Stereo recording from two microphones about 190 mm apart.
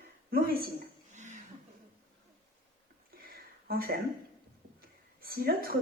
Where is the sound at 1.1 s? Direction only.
40° right (ahead or behind).